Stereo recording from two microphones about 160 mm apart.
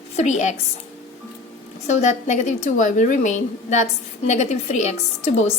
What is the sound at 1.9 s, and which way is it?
A woman's voice, 45° left (ahead or behind).